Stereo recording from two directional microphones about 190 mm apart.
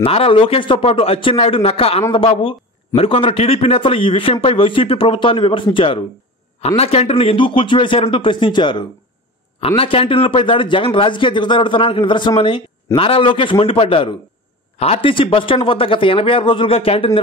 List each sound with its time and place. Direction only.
0.0 s a man's voice: 30° left (ahead or behind)